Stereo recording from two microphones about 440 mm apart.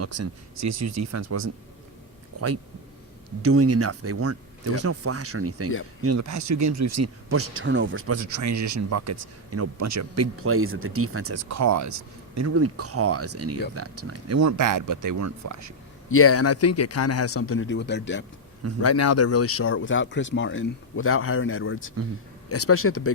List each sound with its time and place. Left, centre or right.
0.0 s speech: right
3.4 s speech: right
16.0 s speech: left